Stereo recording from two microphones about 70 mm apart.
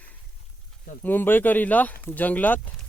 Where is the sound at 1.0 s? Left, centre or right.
Left.